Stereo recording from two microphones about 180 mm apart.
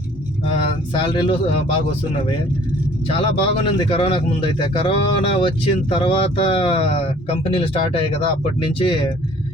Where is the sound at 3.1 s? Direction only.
30° left (ahead or behind).